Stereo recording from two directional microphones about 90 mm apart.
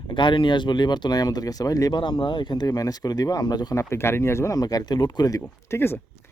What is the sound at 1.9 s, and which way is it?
Speech, 65° left (ahead or behind).